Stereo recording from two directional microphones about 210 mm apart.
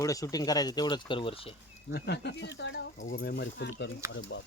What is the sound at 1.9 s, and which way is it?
Speech, 55° left (ahead or behind).